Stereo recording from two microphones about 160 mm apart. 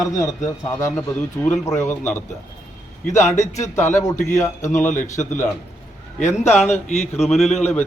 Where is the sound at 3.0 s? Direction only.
50° left (ahead or behind).